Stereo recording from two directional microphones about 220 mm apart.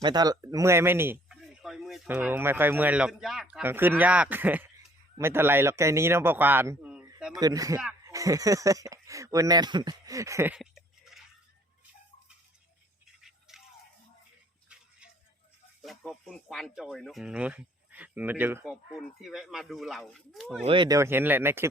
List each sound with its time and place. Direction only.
0.0 s speech: 20° right (ahead or behind)
7.3 s speech: 15° right (ahead or behind)
13.5 s a sound: centre (ahead or behind)
14.7 s a sound: 5° right (ahead or behind)
15.8 s speech: centre (ahead or behind)
20.7 s speech: 20° right (ahead or behind)